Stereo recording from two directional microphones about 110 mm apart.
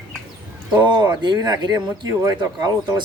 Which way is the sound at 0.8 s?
40° right (ahead or behind).